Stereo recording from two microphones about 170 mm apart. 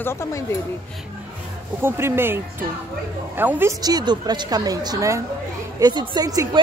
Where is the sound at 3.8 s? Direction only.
25° right (ahead or behind).